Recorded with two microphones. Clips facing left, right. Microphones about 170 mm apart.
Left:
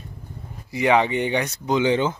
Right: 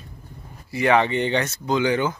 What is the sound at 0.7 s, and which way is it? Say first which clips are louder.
Speech: even; 15° left (ahead or behind).